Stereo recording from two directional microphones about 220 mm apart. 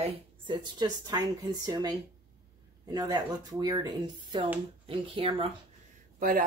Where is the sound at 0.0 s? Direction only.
20° right (ahead or behind).